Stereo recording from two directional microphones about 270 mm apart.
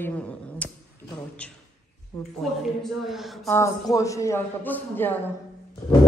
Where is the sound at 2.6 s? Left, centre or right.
Centre.